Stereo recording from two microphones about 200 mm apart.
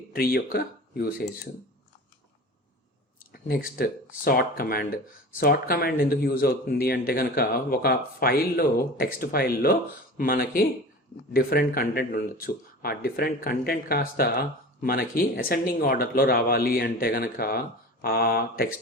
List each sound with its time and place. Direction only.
0.1 s speech: 45° left (ahead or behind)
3.3 s speech: 45° left (ahead or behind)